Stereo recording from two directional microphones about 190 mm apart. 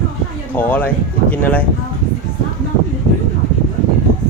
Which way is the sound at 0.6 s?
10° left (ahead or behind).